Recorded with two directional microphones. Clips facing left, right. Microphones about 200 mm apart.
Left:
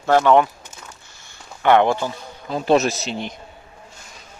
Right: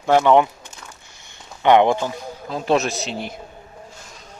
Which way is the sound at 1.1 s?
20° right (ahead or behind).